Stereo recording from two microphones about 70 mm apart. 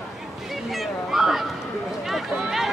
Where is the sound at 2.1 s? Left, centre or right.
Centre.